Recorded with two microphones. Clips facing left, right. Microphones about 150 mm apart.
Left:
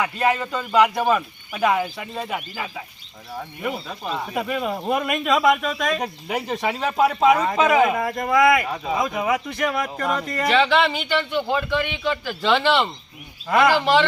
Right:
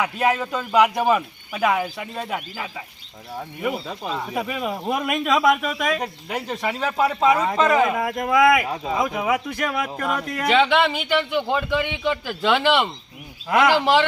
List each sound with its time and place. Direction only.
0.0 s speech: 5° right (ahead or behind)
6.0 s speech: 10° left (ahead or behind)
7.9 s speech: 5° right (ahead or behind)